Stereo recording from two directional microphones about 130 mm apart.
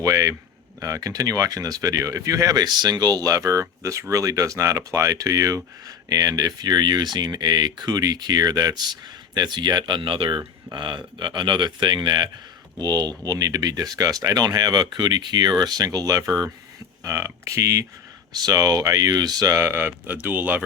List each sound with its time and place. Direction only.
0.0 s speech: 25° right (ahead or behind)